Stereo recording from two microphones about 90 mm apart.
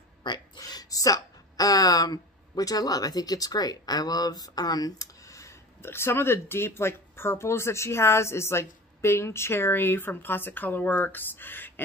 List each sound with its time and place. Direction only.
0.2 s speech: 60° left (ahead or behind)
0.6 s speech: 45° left (ahead or behind); by 11.8 s 20° left (ahead or behind)